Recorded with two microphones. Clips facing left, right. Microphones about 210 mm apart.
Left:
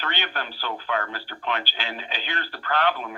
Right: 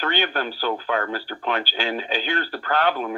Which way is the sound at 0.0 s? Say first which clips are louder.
Right 7 dB; 45° right (ahead or behind).